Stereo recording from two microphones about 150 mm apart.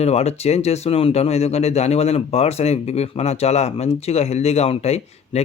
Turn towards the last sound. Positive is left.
turn(degrees=45)  # may be behind; listen again after turning